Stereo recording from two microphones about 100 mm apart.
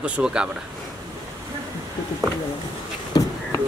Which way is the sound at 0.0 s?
10° right (ahead or behind).